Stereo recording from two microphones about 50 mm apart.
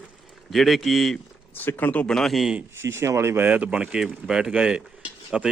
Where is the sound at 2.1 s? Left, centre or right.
Centre.